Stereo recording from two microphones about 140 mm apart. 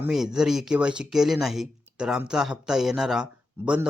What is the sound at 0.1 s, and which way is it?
A man's voice, 5° right (ahead or behind).